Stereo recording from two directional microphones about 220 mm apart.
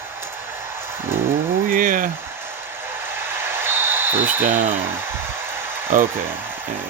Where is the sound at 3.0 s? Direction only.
10° right (ahead or behind).